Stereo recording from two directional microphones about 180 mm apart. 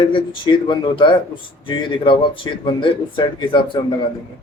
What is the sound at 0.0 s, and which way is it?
Speech, 25° left (ahead or behind).